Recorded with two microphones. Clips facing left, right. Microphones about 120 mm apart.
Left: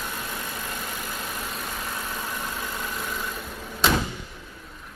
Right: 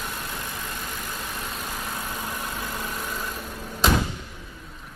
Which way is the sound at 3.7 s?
5° right (ahead or behind).